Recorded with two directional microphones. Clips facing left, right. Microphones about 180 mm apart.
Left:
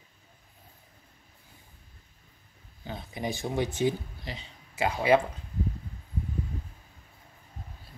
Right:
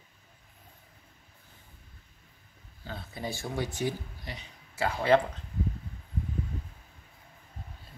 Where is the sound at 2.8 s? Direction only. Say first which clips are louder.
Left 3 dB; 15° left (ahead or behind).